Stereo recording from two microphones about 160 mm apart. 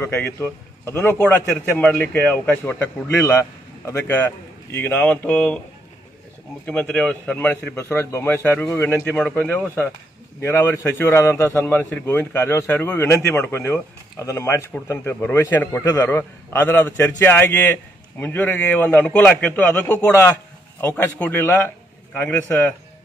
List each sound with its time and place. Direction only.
0.0 s a man's voice: 15° left (ahead or behind)
6.6 s a man's voice: 5° left (ahead or behind)